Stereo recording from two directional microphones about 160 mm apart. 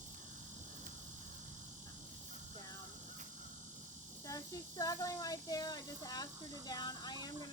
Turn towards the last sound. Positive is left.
turn(degrees=25)  # may be behind; listen again after turning